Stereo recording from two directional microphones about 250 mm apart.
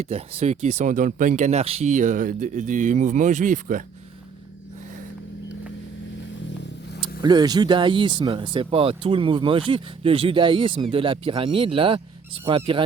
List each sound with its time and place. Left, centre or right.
0.0 s speech: right
7.2 s speech: centre